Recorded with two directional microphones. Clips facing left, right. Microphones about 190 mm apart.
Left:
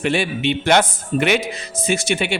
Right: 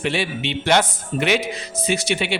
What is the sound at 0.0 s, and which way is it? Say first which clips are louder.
Speech: left 4 dB; 50° left (ahead or behind).